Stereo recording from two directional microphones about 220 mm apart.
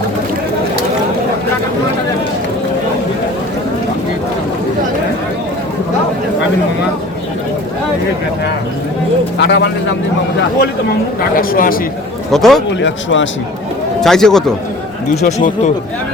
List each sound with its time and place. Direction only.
9.4 s speech: 50° left (ahead or behind)
11.3 s a man's voice: 40° left (ahead or behind)
12.3 s a man's voice: centre (ahead or behind)
12.8 s a man's voice: 55° left (ahead or behind)
14.0 s a man's voice: centre (ahead or behind)
15.3 s a man's voice: 35° left (ahead or behind)